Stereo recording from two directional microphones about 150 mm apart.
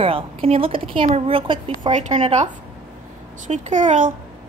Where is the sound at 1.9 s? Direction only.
50° right (ahead or behind).